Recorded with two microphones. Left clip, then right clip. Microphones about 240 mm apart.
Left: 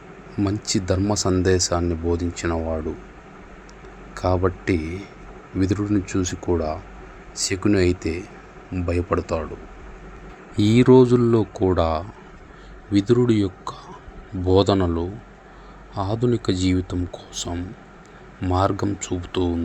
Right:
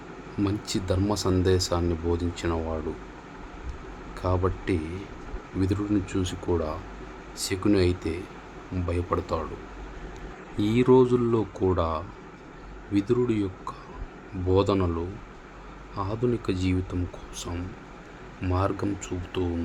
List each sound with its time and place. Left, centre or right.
0.3 s speech: centre
4.1 s speech: centre
10.6 s speech: centre